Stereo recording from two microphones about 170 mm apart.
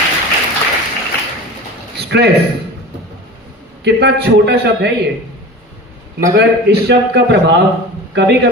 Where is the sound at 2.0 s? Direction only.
75° right (ahead or behind).